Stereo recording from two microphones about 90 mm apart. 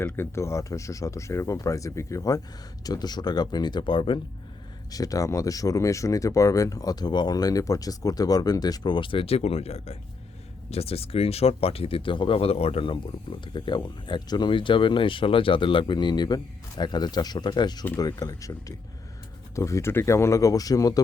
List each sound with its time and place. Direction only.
0.0 s speech: 30° left (ahead or behind); by 4.2 s 70° left (ahead or behind)
4.9 s speech: 40° left (ahead or behind)
17.9 s speech: 40° left (ahead or behind)